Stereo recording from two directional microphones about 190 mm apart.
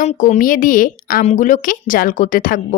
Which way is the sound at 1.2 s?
40° left (ahead or behind).